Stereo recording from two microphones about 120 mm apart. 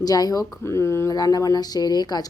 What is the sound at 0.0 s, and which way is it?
Speech, 30° left (ahead or behind).